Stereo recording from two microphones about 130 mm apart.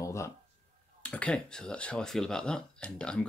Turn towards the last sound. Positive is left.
turn(degrees=5)  # may be behind; listen again after turning